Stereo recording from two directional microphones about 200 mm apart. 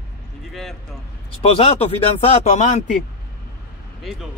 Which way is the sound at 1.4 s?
30° left (ahead or behind).